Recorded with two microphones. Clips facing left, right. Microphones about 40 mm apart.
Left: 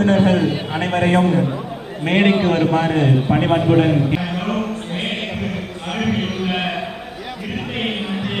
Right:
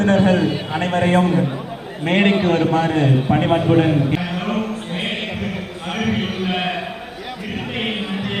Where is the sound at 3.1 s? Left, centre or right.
Centre.